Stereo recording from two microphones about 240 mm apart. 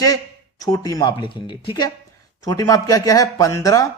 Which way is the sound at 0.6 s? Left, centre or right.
Centre.